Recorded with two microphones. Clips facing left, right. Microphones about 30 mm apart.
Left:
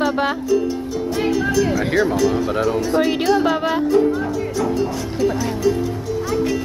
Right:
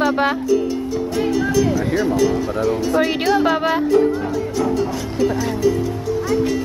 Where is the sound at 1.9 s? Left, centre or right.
Left.